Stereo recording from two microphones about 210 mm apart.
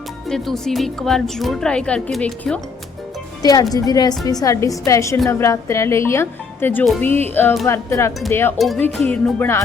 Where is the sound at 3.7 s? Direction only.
20° left (ahead or behind).